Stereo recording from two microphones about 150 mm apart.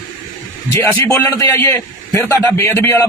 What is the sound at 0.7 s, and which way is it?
A man's voice, 20° left (ahead or behind).